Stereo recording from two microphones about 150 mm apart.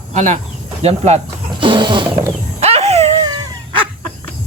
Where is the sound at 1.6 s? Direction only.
35° right (ahead or behind).